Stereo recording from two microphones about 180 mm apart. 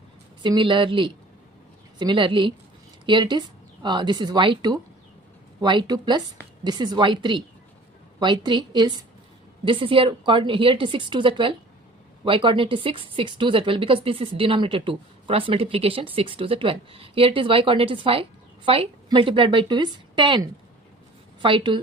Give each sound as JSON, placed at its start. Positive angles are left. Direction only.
{"t": 0.4, "sound": "speech", "side_deg": -25}